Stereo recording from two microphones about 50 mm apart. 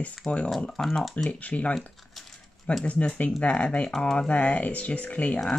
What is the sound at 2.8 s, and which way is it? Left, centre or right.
Speech, left.